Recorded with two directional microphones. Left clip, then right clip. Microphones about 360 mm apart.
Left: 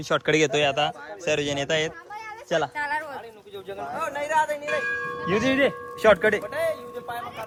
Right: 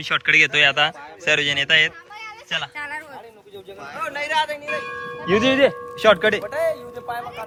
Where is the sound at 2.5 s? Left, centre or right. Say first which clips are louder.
Left 2 dB; left.